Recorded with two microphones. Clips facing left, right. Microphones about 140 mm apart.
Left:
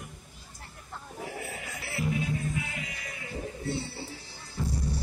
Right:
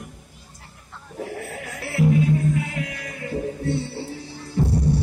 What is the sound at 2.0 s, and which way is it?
Music, 65° right (ahead or behind).